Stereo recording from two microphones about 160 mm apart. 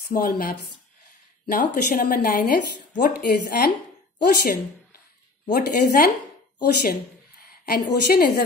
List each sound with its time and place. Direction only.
0.1 s a woman's voice: 65° left (ahead or behind)